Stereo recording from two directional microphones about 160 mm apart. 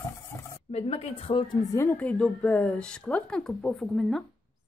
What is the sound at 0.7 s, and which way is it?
Speech, 40° left (ahead or behind).